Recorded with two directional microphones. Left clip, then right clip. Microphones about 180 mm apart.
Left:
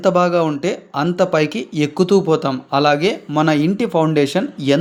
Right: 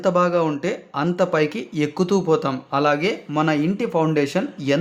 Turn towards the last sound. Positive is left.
turn(degrees=20)  # may be behind; listen again after turning